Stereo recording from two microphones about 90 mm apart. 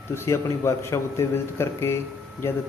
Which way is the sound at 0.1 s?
30° left (ahead or behind).